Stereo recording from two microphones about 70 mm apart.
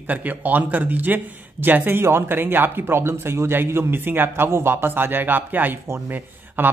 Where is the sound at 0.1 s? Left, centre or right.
Right.